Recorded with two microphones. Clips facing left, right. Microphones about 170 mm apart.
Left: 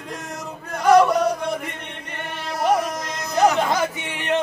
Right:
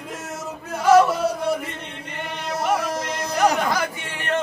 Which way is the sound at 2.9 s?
30° right (ahead or behind).